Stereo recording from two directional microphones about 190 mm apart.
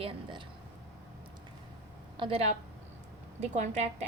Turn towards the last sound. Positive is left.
turn(degrees=-35)  # may be behind; listen again after turning